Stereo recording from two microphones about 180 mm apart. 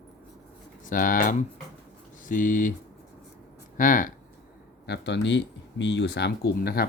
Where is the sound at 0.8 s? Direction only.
50° left (ahead or behind).